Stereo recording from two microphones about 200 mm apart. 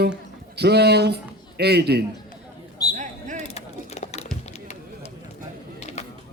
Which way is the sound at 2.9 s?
40° right (ahead or behind).